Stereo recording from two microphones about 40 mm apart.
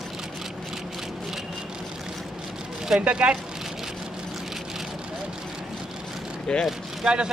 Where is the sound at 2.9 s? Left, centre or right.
Right.